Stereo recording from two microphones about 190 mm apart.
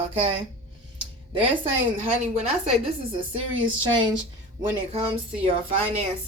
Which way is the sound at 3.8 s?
25° right (ahead or behind).